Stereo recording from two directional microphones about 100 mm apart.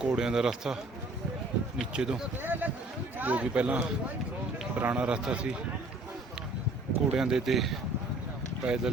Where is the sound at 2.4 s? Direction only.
20° right (ahead or behind).